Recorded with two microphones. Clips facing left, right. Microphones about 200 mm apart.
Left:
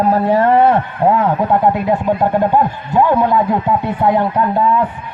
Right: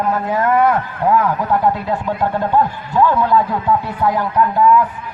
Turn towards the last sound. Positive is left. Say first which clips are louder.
# right 1 dB
turn(degrees=30)  # may be behind; listen again after turning